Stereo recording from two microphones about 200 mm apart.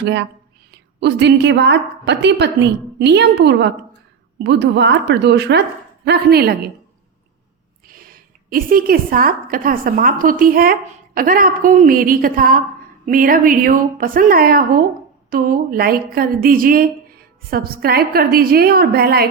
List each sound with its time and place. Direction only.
0.0 s a woman's voice: 60° right (ahead or behind)
7.9 s a woman's voice: 45° right (ahead or behind)